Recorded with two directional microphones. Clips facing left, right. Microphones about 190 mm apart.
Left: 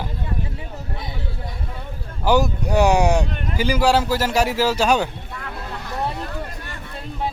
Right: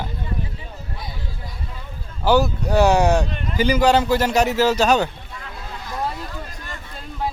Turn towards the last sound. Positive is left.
turn(degrees=60)  # may be behind; listen again after turning